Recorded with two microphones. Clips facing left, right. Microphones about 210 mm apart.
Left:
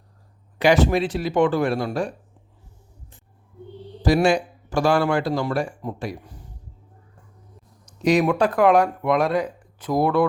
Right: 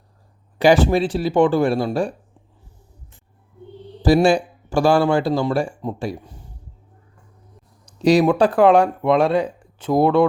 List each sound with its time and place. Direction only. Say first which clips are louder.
0.6 s speech: right 3 dB; 30° right (ahead or behind)
4.0 s speech: right 3 dB; 30° right (ahead or behind)
7.9 s speech: right 4 dB; 30° right (ahead or behind)